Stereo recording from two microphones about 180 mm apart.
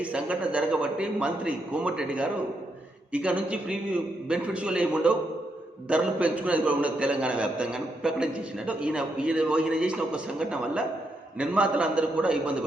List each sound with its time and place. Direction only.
0.0 s a man's voice: 5° right (ahead or behind)